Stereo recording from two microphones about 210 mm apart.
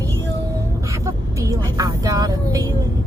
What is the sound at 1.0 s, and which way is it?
Vehicle, 15° right (ahead or behind).